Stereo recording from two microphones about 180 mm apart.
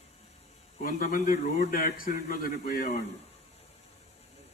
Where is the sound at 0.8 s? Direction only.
50° left (ahead or behind).